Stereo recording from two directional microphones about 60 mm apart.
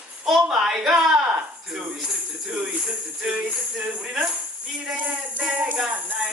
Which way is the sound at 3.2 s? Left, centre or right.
Centre.